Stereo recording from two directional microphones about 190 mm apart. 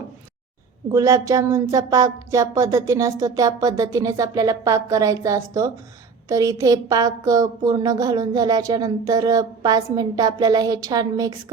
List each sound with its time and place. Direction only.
0.9 s speech: 15° right (ahead or behind)